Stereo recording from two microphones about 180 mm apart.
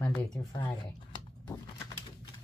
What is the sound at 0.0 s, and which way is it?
Speech, 5° left (ahead or behind).